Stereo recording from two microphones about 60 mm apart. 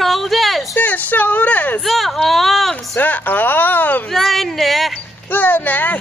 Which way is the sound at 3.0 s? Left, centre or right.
Left.